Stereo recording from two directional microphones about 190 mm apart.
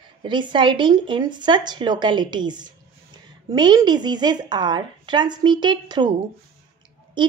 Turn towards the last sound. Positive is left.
turn(degrees=-25)  # may be behind; listen again after turning